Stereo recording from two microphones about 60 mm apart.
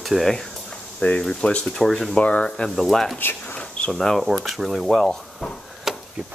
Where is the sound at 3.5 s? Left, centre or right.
Centre.